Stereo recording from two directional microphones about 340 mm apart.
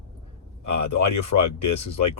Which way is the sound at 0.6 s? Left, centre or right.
Left.